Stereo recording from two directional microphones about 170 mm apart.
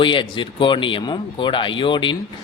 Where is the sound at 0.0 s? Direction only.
30° left (ahead or behind).